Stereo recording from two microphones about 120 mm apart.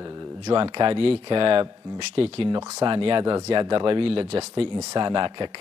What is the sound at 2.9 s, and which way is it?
Speech, 45° right (ahead or behind).